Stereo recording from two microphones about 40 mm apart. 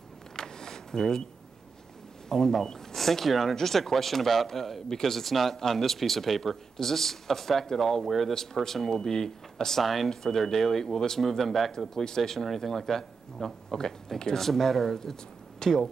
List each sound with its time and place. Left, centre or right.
0.4 s vehicle: centre
2.2 s speech: centre